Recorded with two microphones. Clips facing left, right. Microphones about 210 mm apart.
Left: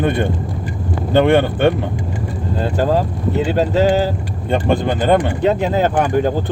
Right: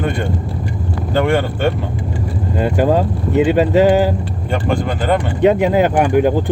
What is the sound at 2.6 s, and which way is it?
Speech, 15° right (ahead or behind).